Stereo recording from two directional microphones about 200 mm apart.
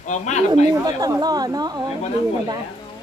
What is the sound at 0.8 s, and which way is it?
Speech, 20° right (ahead or behind).